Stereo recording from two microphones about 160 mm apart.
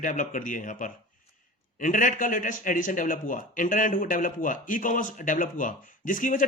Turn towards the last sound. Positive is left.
turn(degrees=55)  # may be behind; listen again after turning